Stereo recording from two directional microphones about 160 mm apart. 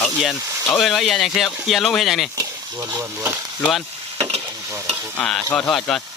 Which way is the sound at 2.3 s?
20° right (ahead or behind).